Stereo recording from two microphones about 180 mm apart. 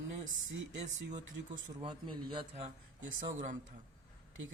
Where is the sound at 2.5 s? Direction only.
40° right (ahead or behind).